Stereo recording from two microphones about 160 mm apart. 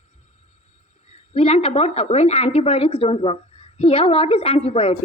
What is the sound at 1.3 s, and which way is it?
A woman's voice, 40° left (ahead or behind).